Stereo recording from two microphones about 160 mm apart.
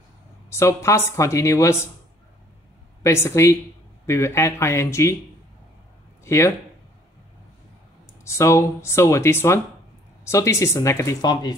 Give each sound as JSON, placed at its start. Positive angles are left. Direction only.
{"t": 0.5, "sound": "speech", "side_deg": 20}
{"t": 3.0, "sound": "speech", "side_deg": 15}
{"t": 6.2, "sound": "speech", "side_deg": 15}
{"t": 8.2, "sound": "speech", "side_deg": 15}